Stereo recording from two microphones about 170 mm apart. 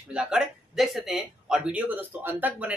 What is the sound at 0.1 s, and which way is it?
Speech, 5° right (ahead or behind).